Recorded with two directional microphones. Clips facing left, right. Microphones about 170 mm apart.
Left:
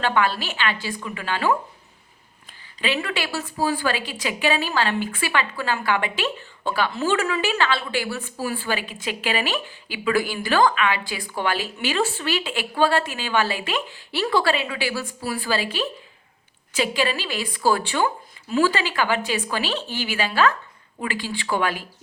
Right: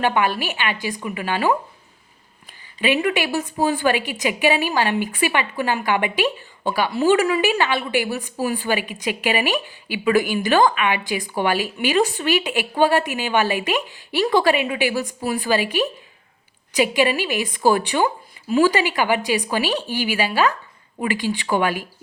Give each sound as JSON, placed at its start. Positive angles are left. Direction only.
{"t": 0.0, "sound": "a woman's voice", "side_deg": -15}
{"t": 2.8, "sound": "a woman's voice", "side_deg": -15}